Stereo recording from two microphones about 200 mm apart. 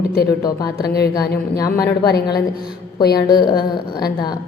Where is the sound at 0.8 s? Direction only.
50° left (ahead or behind).